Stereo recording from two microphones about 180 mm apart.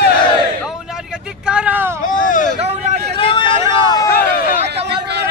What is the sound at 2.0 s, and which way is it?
Vehicle, 45° left (ahead or behind).